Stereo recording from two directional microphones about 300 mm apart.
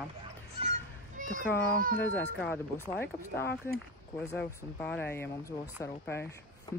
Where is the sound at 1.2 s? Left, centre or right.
Right.